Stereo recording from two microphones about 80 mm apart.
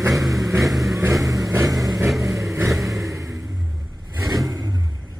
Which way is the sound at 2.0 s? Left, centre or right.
Centre.